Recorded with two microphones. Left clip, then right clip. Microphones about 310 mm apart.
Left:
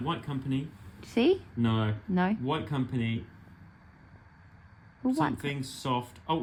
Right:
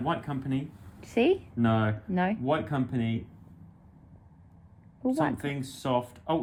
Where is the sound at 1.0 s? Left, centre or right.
Centre.